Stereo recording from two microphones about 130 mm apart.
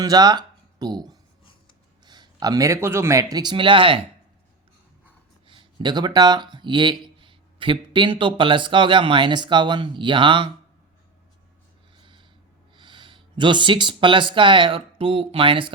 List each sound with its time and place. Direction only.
0.0 s speech: 30° right (ahead or behind)
5.5 s speech: 35° right (ahead or behind)
12.0 s a sound: 40° right (ahead or behind)
12.7 s speech: 40° right (ahead or behind)